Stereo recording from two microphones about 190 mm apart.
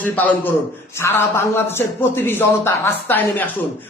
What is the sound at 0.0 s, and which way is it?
A man's voice, 10° left (ahead or behind).